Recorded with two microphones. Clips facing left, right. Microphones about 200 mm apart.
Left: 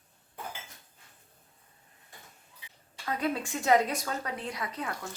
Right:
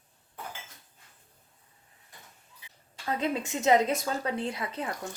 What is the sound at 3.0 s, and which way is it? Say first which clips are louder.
A woman's voice: right 1 dB; 25° right (ahead or behind).